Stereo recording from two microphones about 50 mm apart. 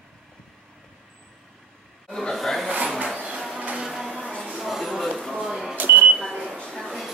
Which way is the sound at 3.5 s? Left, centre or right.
Centre.